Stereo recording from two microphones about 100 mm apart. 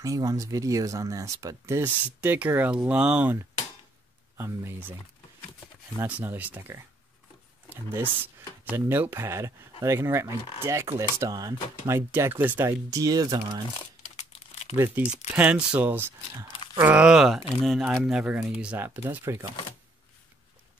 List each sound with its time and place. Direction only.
0.0 s speech: 35° right (ahead or behind)
1.8 s speech: 15° right (ahead or behind)
4.4 s speech: 20° right (ahead or behind)
6.0 s speech: 15° right (ahead or behind)
7.7 s speech: 20° right (ahead or behind)
12.9 s speech: 35° right (ahead or behind)
15.0 s speech: 15° right (ahead or behind)
18.8 s speech: 20° right (ahead or behind)